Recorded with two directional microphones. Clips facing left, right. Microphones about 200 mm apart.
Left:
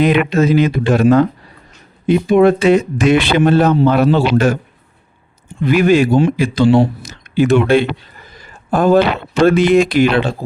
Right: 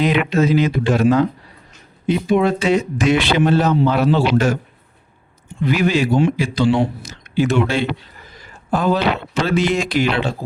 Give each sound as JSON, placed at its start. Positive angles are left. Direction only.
{"t": 0.0, "sound": "speech", "side_deg": 55}
{"t": 5.6, "sound": "speech", "side_deg": 50}